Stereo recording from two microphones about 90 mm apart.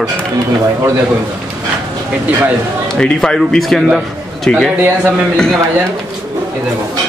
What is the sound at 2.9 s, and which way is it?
Speech, 5° left (ahead or behind).